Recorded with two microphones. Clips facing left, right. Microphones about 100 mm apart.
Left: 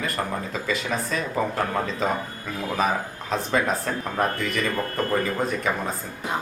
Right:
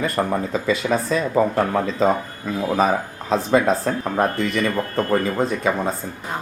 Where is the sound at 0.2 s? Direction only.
30° right (ahead or behind).